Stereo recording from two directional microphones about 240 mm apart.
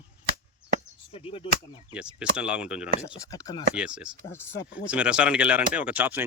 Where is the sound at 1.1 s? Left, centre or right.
Left.